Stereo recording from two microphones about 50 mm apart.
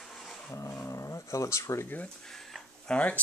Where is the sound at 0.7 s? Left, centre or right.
Left.